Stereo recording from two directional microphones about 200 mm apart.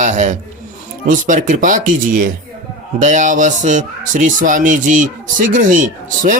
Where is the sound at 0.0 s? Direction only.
35° right (ahead or behind).